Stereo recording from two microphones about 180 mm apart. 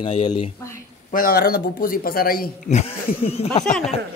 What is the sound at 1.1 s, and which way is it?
Speech, 55° left (ahead or behind).